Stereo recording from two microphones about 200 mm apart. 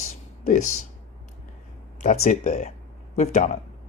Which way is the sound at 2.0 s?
35° left (ahead or behind).